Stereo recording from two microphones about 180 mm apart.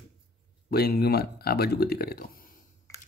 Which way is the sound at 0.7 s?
60° left (ahead or behind).